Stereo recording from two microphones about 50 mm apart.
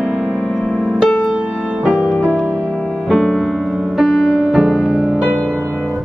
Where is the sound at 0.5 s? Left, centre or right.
Centre.